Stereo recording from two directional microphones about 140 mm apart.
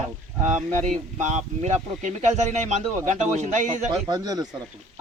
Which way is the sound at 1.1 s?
55° right (ahead or behind).